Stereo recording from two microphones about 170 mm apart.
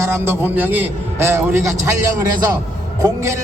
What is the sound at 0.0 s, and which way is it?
A man's voice, 15° right (ahead or behind).